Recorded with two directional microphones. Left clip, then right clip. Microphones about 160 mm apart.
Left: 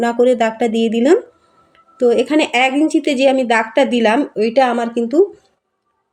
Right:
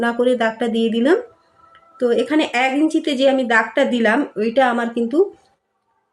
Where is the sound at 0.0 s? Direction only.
10° left (ahead or behind).